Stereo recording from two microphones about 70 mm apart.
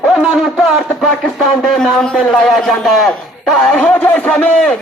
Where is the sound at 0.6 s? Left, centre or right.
Centre.